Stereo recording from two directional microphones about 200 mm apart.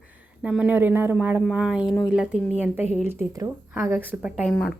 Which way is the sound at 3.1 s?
15° right (ahead or behind).